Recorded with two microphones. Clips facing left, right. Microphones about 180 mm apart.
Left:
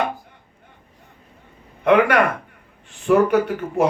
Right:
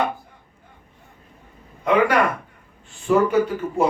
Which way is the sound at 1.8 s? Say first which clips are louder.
Left 2 dB; 60° left (ahead or behind).